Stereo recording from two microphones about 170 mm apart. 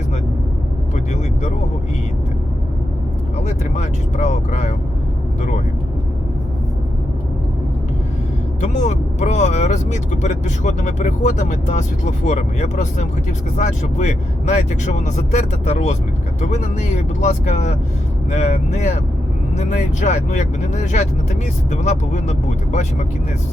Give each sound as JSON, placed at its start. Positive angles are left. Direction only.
{"t": 3.4, "sound": "speech", "side_deg": 45}
{"t": 8.6, "sound": "speech", "side_deg": 45}